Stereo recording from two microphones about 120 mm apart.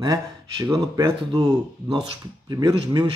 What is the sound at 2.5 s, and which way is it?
Speech, 35° right (ahead or behind).